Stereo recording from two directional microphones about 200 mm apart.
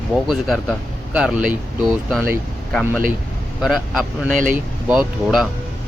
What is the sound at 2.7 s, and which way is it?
Speech, 10° left (ahead or behind).